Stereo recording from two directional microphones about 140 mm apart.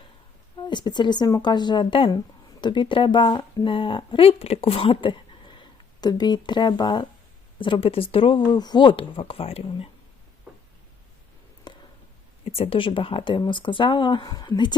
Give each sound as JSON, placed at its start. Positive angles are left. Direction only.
{"t": 0.7, "sound": "a woman's voice", "side_deg": 30}
{"t": 11.7, "sound": "a sound", "side_deg": 30}
{"t": 12.5, "sound": "speech", "side_deg": 45}